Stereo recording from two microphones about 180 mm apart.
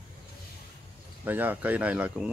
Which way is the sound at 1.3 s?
10° right (ahead or behind).